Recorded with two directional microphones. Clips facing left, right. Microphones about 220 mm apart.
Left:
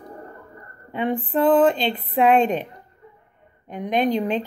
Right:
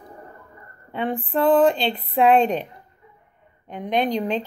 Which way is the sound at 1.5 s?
5° left (ahead or behind).